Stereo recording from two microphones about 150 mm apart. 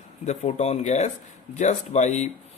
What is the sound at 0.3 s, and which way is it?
Speech, 50° left (ahead or behind).